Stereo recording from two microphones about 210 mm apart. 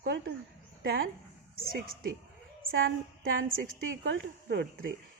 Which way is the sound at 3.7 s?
65° right (ahead or behind).